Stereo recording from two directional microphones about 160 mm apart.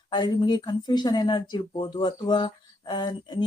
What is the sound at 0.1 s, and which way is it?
Speech, 25° left (ahead or behind).